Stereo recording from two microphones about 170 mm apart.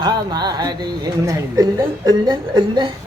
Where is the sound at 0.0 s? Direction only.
25° right (ahead or behind).